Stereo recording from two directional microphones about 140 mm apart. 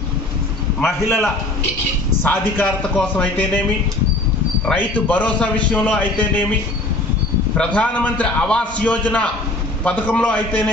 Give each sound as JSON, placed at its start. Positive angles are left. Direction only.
{"t": 1.0, "sound": "a man's voice", "side_deg": 20}
{"t": 4.6, "sound": "a man's voice", "side_deg": 10}
{"t": 7.5, "sound": "a man's voice", "side_deg": 10}